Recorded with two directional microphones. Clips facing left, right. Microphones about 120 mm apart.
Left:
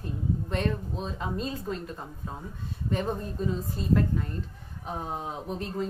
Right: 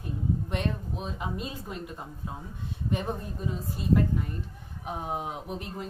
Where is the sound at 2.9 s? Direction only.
10° right (ahead or behind).